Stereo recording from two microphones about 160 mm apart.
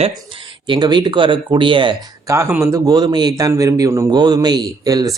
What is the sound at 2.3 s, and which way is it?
Speech, 15° right (ahead or behind).